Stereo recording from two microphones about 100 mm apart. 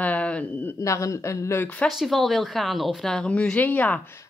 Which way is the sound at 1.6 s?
15° left (ahead or behind).